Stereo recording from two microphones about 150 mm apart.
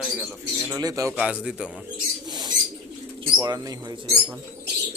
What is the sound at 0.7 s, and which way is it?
Speech, 25° right (ahead or behind).